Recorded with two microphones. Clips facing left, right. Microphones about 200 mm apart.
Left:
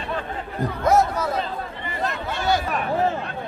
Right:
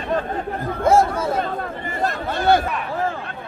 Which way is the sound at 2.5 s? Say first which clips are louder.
Right 6 dB; 55° right (ahead or behind).